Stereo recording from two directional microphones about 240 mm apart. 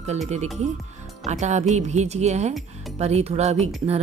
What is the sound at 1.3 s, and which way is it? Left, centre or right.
Speech, right.